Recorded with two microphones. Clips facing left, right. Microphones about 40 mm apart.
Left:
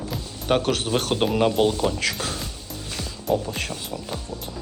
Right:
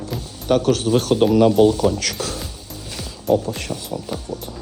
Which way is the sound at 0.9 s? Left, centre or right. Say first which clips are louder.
Right 8 dB; centre.